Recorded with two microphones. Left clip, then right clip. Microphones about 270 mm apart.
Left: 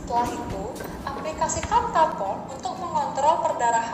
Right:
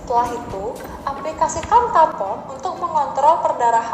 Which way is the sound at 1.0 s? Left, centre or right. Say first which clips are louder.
Right 7 dB; right.